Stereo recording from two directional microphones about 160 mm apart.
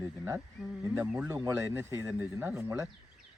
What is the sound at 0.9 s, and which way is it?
Speech, 5° right (ahead or behind).